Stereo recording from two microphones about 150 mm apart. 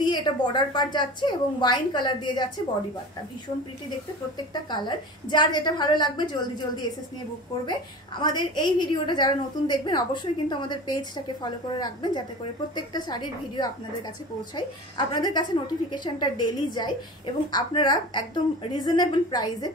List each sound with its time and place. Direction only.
0.0 s a woman's voice: 30° left (ahead or behind)
4.6 s a woman's voice: 30° left (ahead or behind)
8.2 s a woman's voice: 30° left (ahead or behind)